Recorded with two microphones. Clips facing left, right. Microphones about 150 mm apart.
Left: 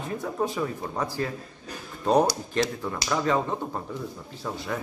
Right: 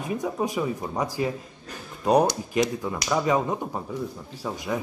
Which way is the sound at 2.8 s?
15° right (ahead or behind).